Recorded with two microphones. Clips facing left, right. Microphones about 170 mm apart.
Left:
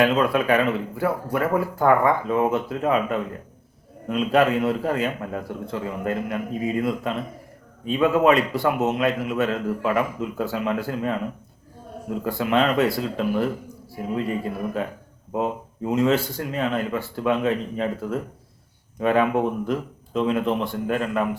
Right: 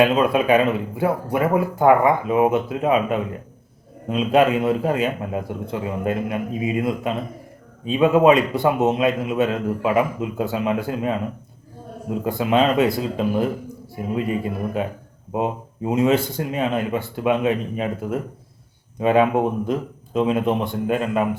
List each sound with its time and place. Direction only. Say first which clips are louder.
0.0 s a man's voice: right 3 dB; 20° right (ahead or behind)
12.4 s a man's voice: right 2 dB; 20° right (ahead or behind)